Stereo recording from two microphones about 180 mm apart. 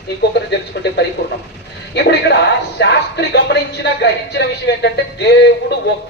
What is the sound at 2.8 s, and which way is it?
Speech, 70° left (ahead or behind).